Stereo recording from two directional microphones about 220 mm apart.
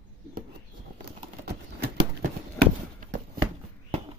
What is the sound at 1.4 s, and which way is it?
Horse, 45° right (ahead or behind).